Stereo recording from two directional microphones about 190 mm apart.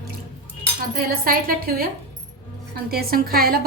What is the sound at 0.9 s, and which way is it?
Speech, 50° right (ahead or behind).